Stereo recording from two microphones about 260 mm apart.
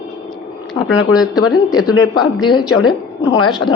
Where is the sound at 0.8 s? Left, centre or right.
Centre.